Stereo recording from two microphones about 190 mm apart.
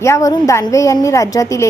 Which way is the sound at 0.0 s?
15° left (ahead or behind).